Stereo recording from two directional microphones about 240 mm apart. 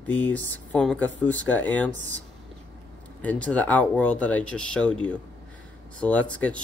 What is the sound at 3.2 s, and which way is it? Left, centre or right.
Speech, centre.